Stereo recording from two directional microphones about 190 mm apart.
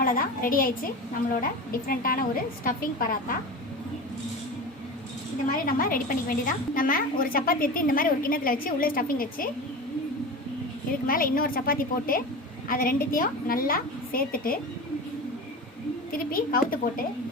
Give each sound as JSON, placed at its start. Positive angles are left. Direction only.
{"t": 0.0, "sound": "a woman's voice", "side_deg": 45}
{"t": 1.9, "sound": "a woman's voice", "side_deg": 50}
{"t": 5.5, "sound": "a woman's voice", "side_deg": 50}
{"t": 11.0, "sound": "a woman's voice", "side_deg": 50}
{"t": 16.1, "sound": "a woman's voice", "side_deg": 50}